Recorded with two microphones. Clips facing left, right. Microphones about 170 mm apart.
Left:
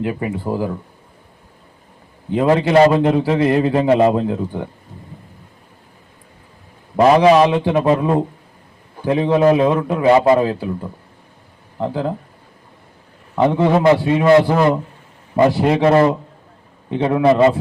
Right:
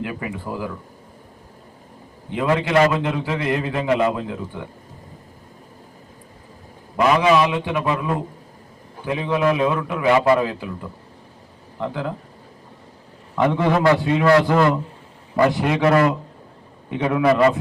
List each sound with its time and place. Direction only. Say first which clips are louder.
0.0 s a man's voice: left 6 dB; 30° left (ahead or behind)
2.3 s a man's voice: left 5 dB; 35° left (ahead or behind)
6.9 s a man's voice: left 6 dB; 35° left (ahead or behind)
13.3 s a man's voice: left 4 dB; 25° left (ahead or behind)